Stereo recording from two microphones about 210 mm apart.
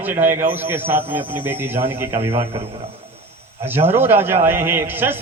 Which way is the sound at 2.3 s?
30° right (ahead or behind).